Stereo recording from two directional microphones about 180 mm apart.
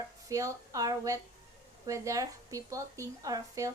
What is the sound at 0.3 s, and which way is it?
A woman's voice, 20° right (ahead or behind).